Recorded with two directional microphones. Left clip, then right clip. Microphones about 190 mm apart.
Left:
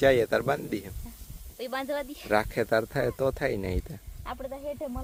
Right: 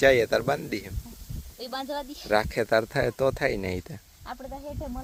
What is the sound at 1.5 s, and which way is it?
Speech, 10° left (ahead or behind).